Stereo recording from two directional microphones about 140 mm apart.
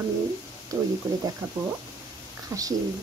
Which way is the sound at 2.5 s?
25° right (ahead or behind).